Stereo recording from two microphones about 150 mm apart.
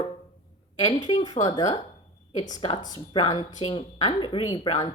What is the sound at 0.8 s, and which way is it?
Speech, 30° left (ahead or behind).